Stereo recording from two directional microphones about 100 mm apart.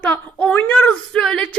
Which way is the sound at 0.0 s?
10° left (ahead or behind).